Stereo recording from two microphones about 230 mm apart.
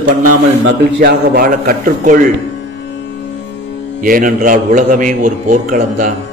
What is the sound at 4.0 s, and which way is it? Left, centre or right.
A man's voice, right.